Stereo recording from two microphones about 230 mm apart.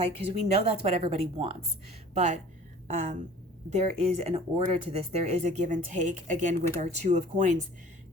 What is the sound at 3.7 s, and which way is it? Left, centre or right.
Speech, right.